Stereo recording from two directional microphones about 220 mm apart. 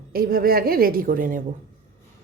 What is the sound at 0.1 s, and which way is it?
A woman's voice, 40° right (ahead or behind).